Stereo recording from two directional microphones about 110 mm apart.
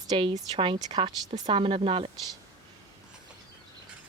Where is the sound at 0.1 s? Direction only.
50° right (ahead or behind).